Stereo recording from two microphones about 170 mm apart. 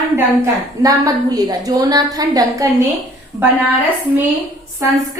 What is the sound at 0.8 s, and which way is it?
A woman's voice, 20° right (ahead or behind).